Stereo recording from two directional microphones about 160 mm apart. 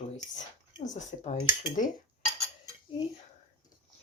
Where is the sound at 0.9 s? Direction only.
50° left (ahead or behind).